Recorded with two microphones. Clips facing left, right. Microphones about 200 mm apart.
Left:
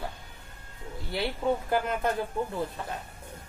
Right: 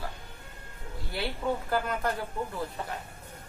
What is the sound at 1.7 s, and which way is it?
Speech, 20° left (ahead or behind).